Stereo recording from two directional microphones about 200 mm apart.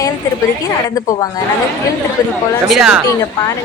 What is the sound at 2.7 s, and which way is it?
Speech, 5° right (ahead or behind).